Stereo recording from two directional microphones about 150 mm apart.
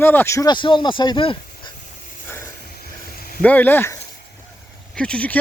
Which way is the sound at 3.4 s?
10° left (ahead or behind).